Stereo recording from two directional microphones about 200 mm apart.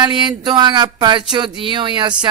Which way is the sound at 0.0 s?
20° right (ahead or behind).